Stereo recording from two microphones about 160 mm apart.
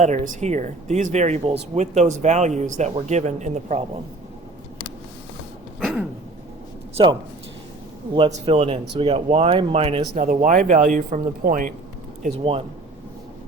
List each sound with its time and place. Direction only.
0.0 s speech: 45° right (ahead or behind)
5.8 s a sound: centre (ahead or behind)
6.9 s speech: 30° right (ahead or behind)
8.3 s speech: 40° right (ahead or behind)
10.2 s speech: 55° right (ahead or behind)
12.4 s speech: 35° right (ahead or behind)